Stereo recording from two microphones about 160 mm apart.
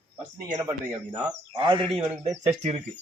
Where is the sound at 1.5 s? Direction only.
30° right (ahead or behind).